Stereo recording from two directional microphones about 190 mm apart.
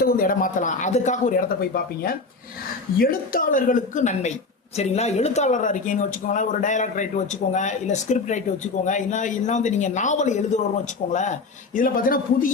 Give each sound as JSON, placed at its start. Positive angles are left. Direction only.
{"t": 0.0, "sound": "speech", "side_deg": 50}